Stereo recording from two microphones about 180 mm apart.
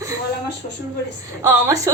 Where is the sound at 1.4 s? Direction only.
15° right (ahead or behind).